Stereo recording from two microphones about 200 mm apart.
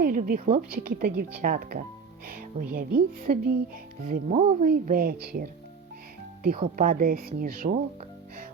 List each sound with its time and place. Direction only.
0.0 s speech: 45° right (ahead or behind)
6.7 s speech: 45° right (ahead or behind)